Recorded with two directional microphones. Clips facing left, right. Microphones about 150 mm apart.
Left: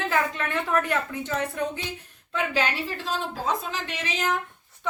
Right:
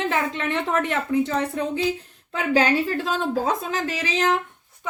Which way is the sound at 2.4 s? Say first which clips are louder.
Right 6 dB; 45° right (ahead or behind).